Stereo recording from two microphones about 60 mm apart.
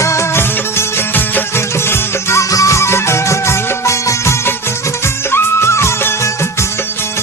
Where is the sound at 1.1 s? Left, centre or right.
Left.